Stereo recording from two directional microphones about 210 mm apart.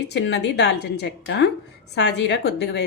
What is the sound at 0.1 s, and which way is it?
Speech, 55° left (ahead or behind).